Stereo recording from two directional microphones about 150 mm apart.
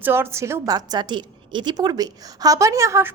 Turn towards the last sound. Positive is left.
turn(degrees=-20)  # may be behind; listen again after turning